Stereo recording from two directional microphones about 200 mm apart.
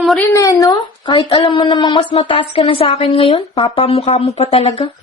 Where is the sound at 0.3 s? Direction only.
15° left (ahead or behind); by 4.9 s 30° left (ahead or behind).